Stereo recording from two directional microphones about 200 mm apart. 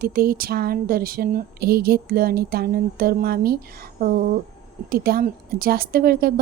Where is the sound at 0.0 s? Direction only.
45° right (ahead or behind).